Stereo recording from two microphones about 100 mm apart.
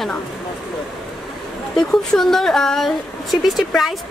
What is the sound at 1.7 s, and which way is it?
Speech, 5° left (ahead or behind).